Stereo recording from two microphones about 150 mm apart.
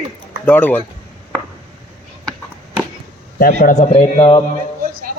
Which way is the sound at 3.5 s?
50° left (ahead or behind).